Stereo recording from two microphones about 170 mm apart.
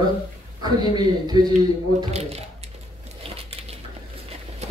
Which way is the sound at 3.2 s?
35° right (ahead or behind).